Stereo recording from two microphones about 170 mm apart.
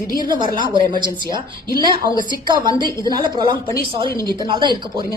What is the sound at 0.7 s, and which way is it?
Speech, 50° left (ahead or behind).